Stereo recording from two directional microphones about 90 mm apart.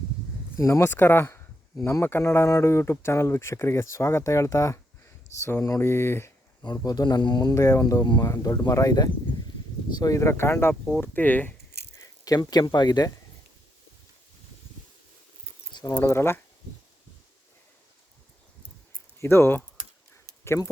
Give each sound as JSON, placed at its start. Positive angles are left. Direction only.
{"t": 0.6, "sound": "speech", "side_deg": 30}
{"t": 6.7, "sound": "speech", "side_deg": 45}
{"t": 7.5, "sound": "speech", "side_deg": 35}
{"t": 11.9, "sound": "speech", "side_deg": 45}
{"t": 15.9, "sound": "speech", "side_deg": 30}
{"t": 19.2, "sound": "speech", "side_deg": 25}